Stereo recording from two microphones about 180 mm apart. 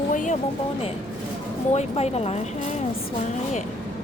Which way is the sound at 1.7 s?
35° left (ahead or behind).